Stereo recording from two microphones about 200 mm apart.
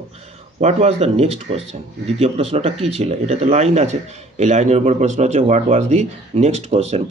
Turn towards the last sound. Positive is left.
turn(degrees=-30)  # may be behind; listen again after turning